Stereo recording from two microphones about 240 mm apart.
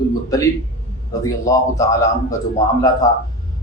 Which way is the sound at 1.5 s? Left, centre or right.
Centre.